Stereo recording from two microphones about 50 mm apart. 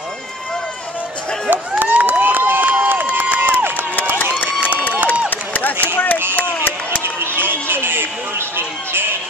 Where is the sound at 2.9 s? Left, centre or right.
Right.